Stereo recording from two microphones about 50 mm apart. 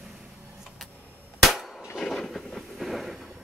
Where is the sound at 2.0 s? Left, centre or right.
Centre.